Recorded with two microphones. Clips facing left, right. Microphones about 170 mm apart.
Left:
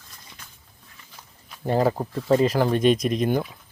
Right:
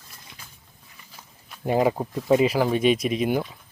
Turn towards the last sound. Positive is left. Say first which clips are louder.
# left 1 dB
turn(degrees=-5)  # may be behind; listen again after turning